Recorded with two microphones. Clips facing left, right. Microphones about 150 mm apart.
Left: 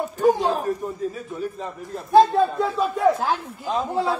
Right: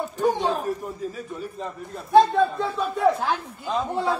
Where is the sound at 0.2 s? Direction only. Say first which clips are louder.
Left 4 dB; 5° left (ahead or behind).